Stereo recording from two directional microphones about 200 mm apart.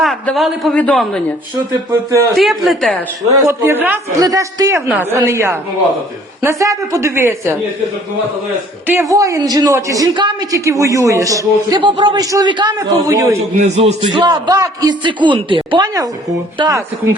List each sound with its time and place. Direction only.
0.0 s a man's voice: centre (ahead or behind)
1.5 s a man's voice: 15° right (ahead or behind)
2.3 s a man's voice: centre (ahead or behind)
3.2 s a man's voice: 15° right (ahead or behind)
8.9 s a man's voice: 15° right (ahead or behind)
13.6 s a man's voice: 35° right (ahead or behind); by 16.8 s 15° right (ahead or behind)